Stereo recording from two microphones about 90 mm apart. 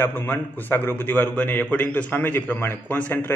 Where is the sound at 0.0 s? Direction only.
20° left (ahead or behind).